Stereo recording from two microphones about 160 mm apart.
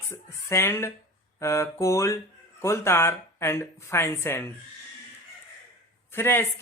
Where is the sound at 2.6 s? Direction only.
15° left (ahead or behind).